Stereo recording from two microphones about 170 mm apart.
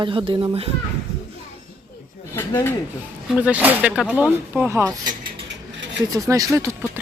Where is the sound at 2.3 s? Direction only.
15° left (ahead or behind).